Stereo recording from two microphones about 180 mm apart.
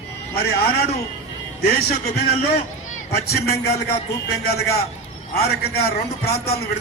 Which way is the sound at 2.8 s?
45° left (ahead or behind).